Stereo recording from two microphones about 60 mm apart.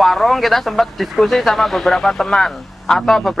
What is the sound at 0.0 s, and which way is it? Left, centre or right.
Speech, centre.